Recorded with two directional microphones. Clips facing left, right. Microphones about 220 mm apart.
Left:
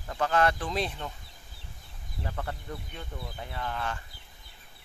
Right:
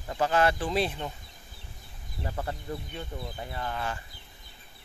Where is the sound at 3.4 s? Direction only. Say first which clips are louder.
Even; 5° right (ahead or behind).